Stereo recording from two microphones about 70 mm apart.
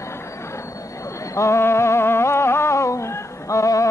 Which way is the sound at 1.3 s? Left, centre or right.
Left.